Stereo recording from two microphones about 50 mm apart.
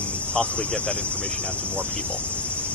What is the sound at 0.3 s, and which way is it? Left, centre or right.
Speech, left.